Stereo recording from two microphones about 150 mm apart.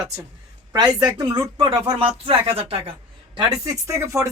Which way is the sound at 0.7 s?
25° right (ahead or behind).